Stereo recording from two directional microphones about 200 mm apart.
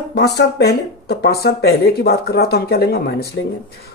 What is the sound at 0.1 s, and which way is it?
Speech, 55° left (ahead or behind).